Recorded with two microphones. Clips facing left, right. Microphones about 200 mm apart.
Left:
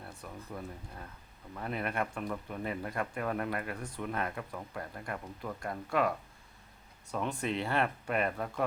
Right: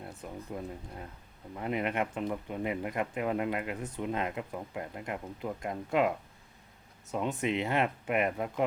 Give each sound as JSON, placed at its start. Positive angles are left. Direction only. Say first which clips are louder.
{"t": 0.0, "sound": "speech", "louder": "right 4 dB", "side_deg": -20}